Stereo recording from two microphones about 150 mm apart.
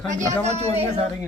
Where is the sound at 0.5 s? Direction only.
45° right (ahead or behind).